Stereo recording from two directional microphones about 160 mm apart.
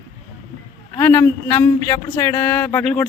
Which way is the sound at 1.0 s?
10° left (ahead or behind).